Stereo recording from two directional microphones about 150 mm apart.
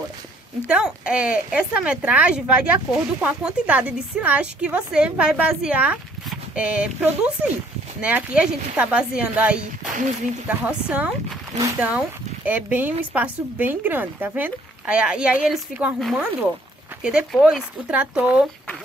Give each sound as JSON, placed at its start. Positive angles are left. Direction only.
{"t": 0.7, "sound": "speech", "side_deg": -5}
{"t": 12.4, "sound": "speech", "side_deg": -10}